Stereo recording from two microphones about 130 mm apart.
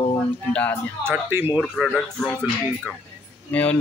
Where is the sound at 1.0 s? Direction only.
15° right (ahead or behind).